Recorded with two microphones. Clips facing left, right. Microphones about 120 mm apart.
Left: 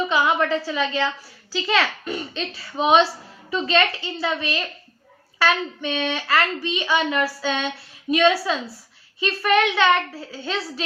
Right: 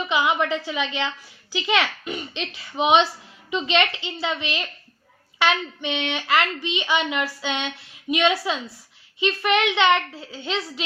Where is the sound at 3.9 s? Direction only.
20° right (ahead or behind).